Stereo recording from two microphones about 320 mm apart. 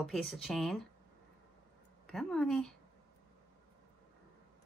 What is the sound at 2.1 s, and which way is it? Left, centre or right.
Speech, centre.